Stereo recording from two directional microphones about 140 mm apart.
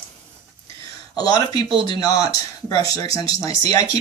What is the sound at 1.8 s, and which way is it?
Speech, 30° left (ahead or behind).